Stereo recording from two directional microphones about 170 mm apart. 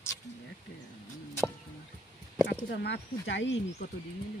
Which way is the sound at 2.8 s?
90° left.